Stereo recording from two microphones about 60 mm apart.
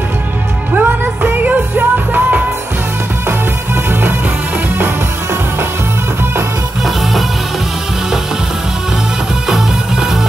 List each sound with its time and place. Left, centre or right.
0.7 s music: right